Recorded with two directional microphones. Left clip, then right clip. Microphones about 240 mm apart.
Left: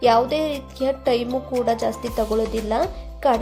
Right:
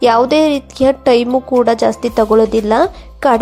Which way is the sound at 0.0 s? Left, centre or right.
Right.